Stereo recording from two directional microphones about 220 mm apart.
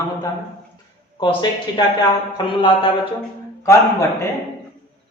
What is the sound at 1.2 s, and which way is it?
A man's voice, 20° left (ahead or behind).